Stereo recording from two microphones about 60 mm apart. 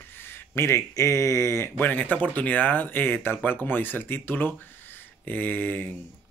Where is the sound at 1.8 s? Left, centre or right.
Left.